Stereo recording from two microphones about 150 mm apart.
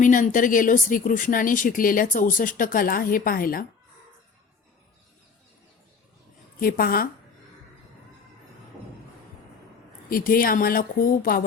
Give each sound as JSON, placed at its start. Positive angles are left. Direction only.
{"t": 0.0, "sound": "speech", "side_deg": 60}
{"t": 6.6, "sound": "speech", "side_deg": 75}
{"t": 10.1, "sound": "speech", "side_deg": 70}